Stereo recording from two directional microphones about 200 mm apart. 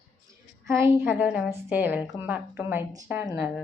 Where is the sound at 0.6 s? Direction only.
15° right (ahead or behind).